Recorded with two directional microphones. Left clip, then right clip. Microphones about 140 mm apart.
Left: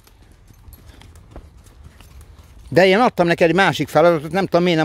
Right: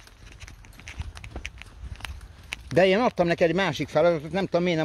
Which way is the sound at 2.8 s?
80° left.